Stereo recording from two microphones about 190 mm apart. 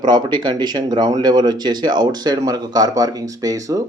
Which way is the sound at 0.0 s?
25° right (ahead or behind).